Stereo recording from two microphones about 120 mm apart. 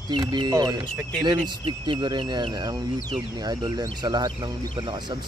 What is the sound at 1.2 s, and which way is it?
Speech, 40° right (ahead or behind).